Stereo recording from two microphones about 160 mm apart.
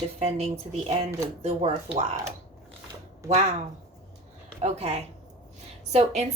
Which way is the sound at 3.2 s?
45° right (ahead or behind).